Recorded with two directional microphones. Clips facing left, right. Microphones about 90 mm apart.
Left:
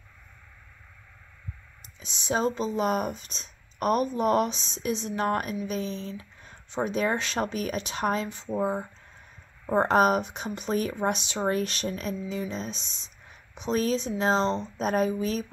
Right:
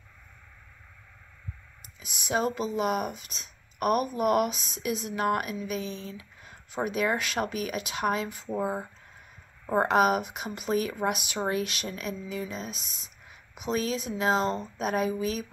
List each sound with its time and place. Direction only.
2.0 s speech: 30° left (ahead or behind)
9.8 s speech: 40° left (ahead or behind)
11.4 s speech: 40° left (ahead or behind)